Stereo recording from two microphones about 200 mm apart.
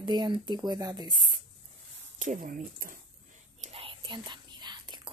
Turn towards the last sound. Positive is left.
turn(degrees=-20)  # may be behind; listen again after turning